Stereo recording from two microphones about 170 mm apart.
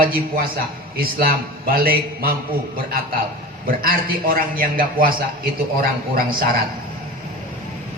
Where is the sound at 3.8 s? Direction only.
55° right (ahead or behind).